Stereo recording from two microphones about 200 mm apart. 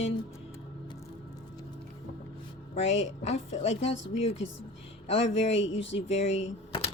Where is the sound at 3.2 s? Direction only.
30° left (ahead or behind).